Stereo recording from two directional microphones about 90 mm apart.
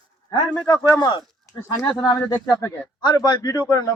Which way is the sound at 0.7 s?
55° left (ahead or behind).